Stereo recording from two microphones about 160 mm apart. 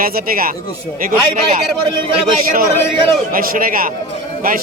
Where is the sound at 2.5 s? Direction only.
60° right (ahead or behind).